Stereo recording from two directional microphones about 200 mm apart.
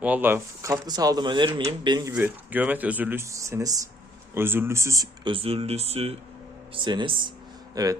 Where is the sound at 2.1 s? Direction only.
10° right (ahead or behind).